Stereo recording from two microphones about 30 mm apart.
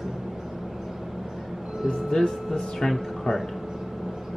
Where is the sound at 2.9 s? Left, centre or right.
Centre.